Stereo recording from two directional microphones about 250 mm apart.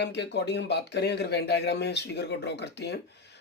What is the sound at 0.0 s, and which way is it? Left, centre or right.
Speech, left.